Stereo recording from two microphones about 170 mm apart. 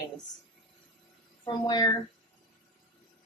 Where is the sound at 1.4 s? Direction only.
25° left (ahead or behind).